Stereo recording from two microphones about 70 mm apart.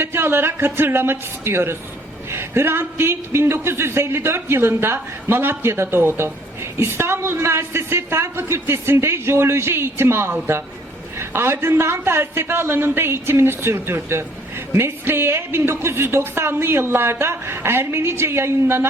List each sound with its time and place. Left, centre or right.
0.0 s a man's voice: right